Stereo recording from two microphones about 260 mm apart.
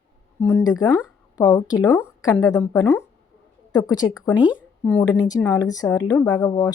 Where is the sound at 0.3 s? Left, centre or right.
Centre.